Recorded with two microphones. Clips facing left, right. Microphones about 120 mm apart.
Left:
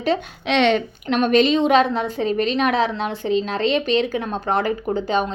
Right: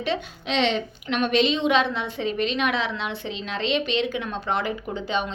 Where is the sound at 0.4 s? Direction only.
60° left (ahead or behind).